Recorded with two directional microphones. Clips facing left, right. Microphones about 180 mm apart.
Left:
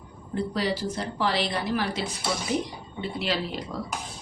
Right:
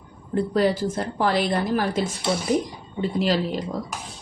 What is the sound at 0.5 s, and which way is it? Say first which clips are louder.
A woman's voice: right 8 dB; 50° right (ahead or behind).